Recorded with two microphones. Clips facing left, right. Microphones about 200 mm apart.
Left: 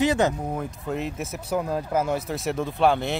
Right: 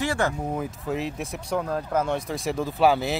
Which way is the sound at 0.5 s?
Centre (ahead or behind).